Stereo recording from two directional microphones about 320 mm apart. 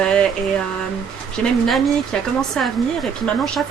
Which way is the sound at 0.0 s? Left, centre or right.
Centre.